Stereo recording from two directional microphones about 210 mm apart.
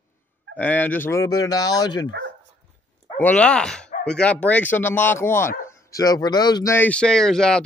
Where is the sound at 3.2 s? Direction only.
5° left (ahead or behind).